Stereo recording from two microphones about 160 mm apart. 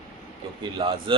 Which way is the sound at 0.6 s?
30° right (ahead or behind).